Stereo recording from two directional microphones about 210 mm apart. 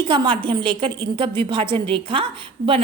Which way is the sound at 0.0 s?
25° right (ahead or behind).